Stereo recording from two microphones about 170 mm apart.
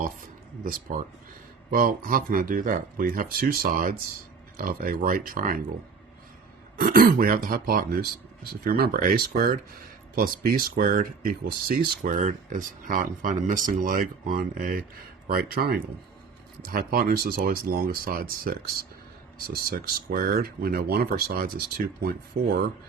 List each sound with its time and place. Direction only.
0.6 s speech: 50° right (ahead or behind)
6.7 s speech: 55° right (ahead or behind)